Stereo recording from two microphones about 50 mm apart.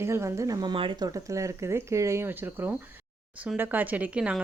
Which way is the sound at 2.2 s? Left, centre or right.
Right.